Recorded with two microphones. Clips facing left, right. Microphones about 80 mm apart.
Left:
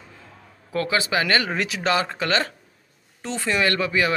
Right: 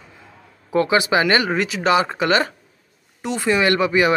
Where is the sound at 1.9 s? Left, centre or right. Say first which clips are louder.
Right 6 dB; centre.